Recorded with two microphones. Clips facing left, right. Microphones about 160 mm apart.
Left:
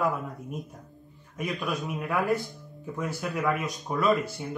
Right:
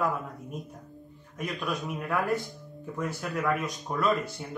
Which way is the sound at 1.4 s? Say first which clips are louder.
Left 2 dB; 5° left (ahead or behind).